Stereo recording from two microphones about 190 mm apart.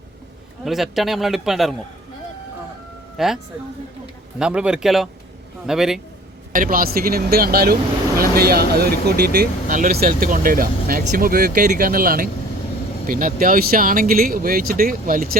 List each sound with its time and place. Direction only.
0.6 s a man's voice: centre (ahead or behind)
3.2 s a man's voice: centre (ahead or behind)
4.4 s a man's voice: 5° right (ahead or behind)
6.5 s speech: 45° right (ahead or behind)